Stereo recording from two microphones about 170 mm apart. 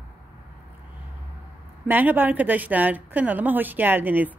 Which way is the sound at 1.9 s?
10° right (ahead or behind).